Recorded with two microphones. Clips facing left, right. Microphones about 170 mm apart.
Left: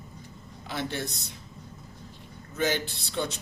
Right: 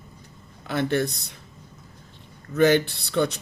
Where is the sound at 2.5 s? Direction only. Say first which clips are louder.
Right 10 dB; 60° right (ahead or behind).